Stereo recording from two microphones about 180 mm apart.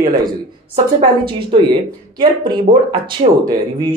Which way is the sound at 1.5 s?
25° right (ahead or behind).